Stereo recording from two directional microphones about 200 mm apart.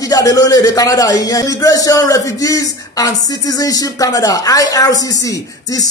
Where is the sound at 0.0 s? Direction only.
15° left (ahead or behind).